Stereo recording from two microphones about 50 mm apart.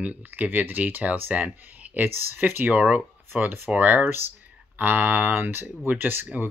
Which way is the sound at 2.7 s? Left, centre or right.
Right.